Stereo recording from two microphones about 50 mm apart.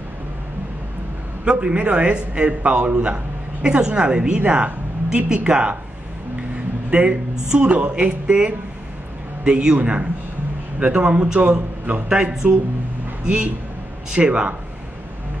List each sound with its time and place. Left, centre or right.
1.4 s a man's voice: centre
4.4 s speech: right
6.9 s a man's voice: right